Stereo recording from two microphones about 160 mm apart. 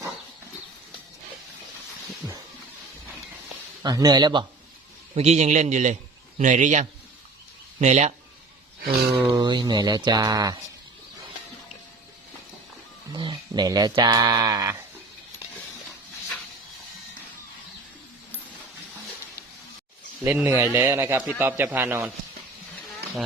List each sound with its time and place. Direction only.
3.8 s speech: 25° right (ahead or behind)
5.1 s a man's voice: 45° right (ahead or behind)
8.8 s speech: 70° right (ahead or behind)
9.1 s speech: 15° right (ahead or behind)
9.4 s speech: 30° right (ahead or behind)
13.1 s speech: 30° right (ahead or behind)
20.2 s speech: 10° right (ahead or behind)